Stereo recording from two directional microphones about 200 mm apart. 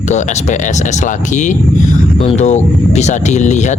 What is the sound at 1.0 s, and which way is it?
Speech, 40° left (ahead or behind).